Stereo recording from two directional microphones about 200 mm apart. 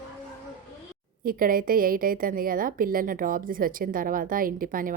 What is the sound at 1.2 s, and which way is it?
A woman's voice, 45° right (ahead or behind).